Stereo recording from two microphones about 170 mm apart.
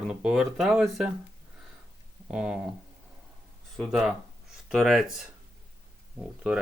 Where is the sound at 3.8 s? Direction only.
5° right (ahead or behind).